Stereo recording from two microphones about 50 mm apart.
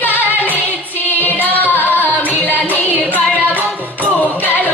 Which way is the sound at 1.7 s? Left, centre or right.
Left.